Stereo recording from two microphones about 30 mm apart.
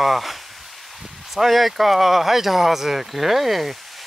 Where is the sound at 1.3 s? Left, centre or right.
Centre.